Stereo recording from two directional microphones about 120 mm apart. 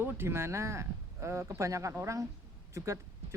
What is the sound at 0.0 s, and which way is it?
Speech, 20° right (ahead or behind).